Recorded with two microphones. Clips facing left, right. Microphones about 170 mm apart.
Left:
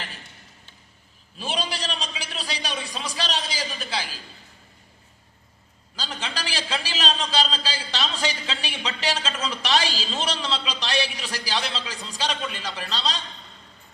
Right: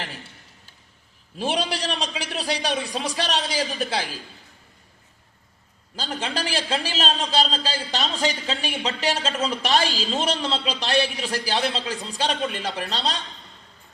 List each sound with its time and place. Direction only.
1.4 s a man's voice: 65° right (ahead or behind)
6.0 s a man's voice: 50° right (ahead or behind)